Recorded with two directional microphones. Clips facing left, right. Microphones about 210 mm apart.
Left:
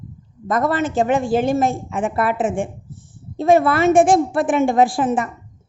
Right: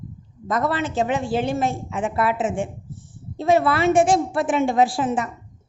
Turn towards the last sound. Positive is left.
turn(degrees=55)  # may be behind; listen again after turning